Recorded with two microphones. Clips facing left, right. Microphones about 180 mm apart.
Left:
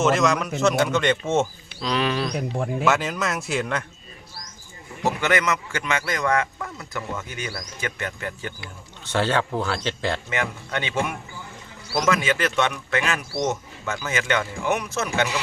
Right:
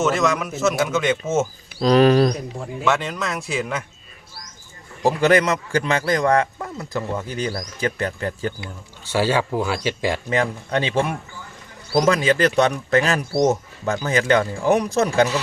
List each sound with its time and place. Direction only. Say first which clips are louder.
0.0 s a man's voice: even; centre (ahead or behind)
1.8 s speech: right 10 dB; 40° right (ahead or behind)
2.8 s a man's voice: right 2 dB; centre (ahead or behind)
5.0 s speech: right 6 dB; 35° right (ahead or behind)
9.0 s speech: right 3 dB; 10° right (ahead or behind)
10.2 s speech: right 6 dB; 35° right (ahead or behind)